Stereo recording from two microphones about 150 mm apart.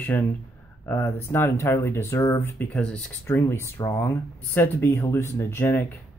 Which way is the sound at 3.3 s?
20° left (ahead or behind).